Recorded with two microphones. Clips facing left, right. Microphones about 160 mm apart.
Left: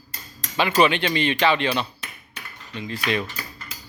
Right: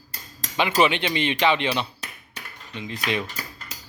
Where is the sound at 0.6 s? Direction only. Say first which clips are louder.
Left 2 dB; 15° right (ahead or behind).